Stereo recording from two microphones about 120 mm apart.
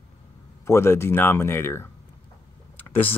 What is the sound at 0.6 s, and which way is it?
Speech, 20° left (ahead or behind).